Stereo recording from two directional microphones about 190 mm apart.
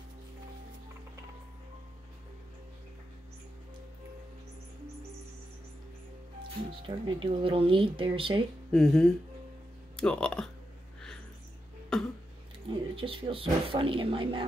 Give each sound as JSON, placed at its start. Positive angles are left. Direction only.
{"t": 6.7, "sound": "speech", "side_deg": -25}
{"t": 8.7, "sound": "speech", "side_deg": 5}
{"t": 11.9, "sound": "cough", "side_deg": 5}
{"t": 12.6, "sound": "speech", "side_deg": -30}